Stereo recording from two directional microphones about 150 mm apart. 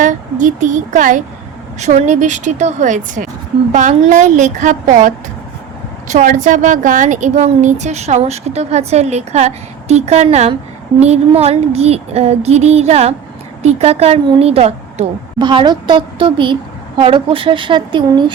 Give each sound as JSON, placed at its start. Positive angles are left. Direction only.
{"t": 0.0, "sound": "a woman's voice", "side_deg": -55}
{"t": 15.4, "sound": "speech", "side_deg": -30}